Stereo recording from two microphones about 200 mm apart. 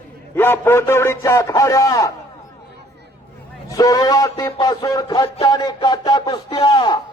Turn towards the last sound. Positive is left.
turn(degrees=20)  # may be behind; listen again after turning